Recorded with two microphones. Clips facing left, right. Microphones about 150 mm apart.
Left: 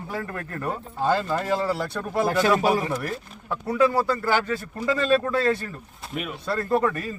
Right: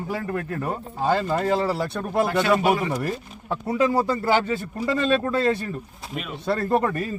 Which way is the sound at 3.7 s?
20° right (ahead or behind).